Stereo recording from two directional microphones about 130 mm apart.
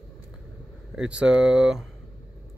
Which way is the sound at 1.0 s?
5° right (ahead or behind).